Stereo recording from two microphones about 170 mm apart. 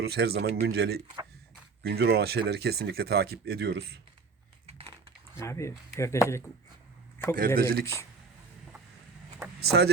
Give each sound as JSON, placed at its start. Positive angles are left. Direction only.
{"t": 0.0, "sound": "speech", "side_deg": -70}
{"t": 1.0, "sound": "speech", "side_deg": -25}
{"t": 1.8, "sound": "speech", "side_deg": -70}
{"t": 4.6, "sound": "typing", "side_deg": -35}
{"t": 5.4, "sound": "speech", "side_deg": 15}
{"t": 7.3, "sound": "speech", "side_deg": -55}
{"t": 9.4, "sound": "vehicle", "side_deg": -15}